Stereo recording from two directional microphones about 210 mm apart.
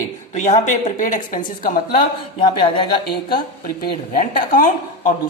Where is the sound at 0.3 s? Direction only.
35° left (ahead or behind).